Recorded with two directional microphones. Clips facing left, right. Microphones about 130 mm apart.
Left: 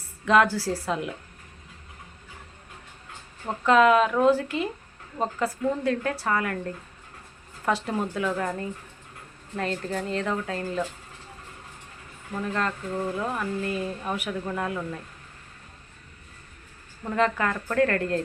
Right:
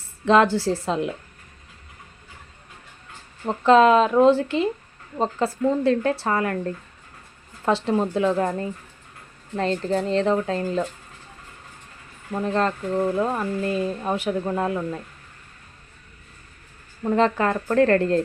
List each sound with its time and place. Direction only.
0.3 s speech: 25° right (ahead or behind)
3.4 s speech: 25° right (ahead or behind)
7.6 s speech: 25° right (ahead or behind)
12.3 s speech: 30° right (ahead or behind)
17.0 s a woman's voice: 30° right (ahead or behind)